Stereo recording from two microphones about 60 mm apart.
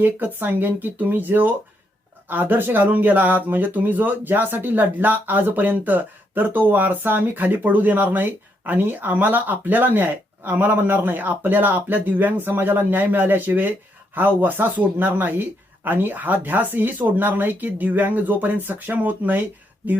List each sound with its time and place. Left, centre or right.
0.0 s speech: right